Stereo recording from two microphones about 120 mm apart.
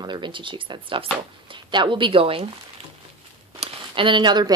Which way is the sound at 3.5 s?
45° right (ahead or behind).